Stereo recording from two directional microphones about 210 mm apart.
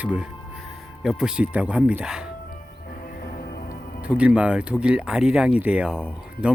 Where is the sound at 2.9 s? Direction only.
40° left (ahead or behind).